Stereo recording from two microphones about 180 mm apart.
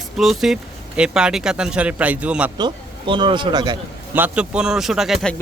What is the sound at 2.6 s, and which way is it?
A man's voice, 25° right (ahead or behind).